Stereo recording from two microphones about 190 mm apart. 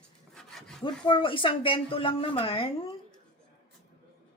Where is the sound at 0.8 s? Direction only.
25° left (ahead or behind).